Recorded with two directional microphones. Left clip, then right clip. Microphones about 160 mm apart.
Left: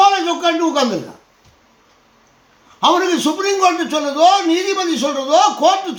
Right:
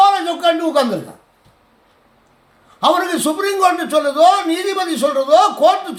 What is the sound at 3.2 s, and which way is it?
Speech, 25° right (ahead or behind).